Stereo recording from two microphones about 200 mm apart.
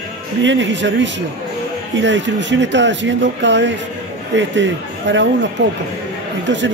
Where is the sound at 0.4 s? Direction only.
65° right (ahead or behind).